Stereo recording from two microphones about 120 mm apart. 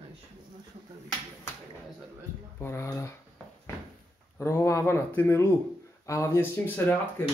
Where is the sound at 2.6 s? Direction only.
20° left (ahead or behind).